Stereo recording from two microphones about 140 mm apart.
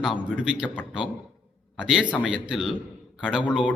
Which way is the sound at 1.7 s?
5° right (ahead or behind).